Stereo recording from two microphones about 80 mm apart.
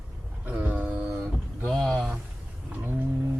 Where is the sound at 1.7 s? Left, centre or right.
Centre.